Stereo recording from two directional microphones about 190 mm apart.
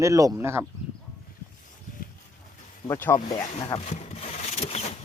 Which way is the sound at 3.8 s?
35° left (ahead or behind).